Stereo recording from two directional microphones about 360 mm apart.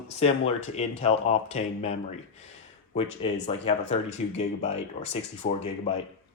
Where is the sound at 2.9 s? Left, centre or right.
Centre.